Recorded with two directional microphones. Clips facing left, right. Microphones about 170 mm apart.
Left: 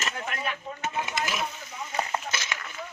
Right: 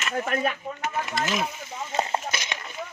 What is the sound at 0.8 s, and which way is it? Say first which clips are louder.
Speech: right 2 dB; 20° left (ahead or behind).